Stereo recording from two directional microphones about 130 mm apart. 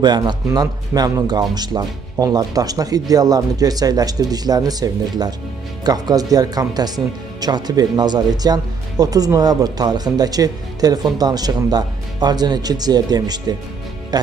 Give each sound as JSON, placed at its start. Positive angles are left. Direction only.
{"t": 0.0, "sound": "speech", "side_deg": -35}